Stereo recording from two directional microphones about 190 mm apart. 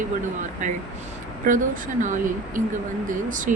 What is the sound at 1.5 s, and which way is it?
Speech, 40° right (ahead or behind).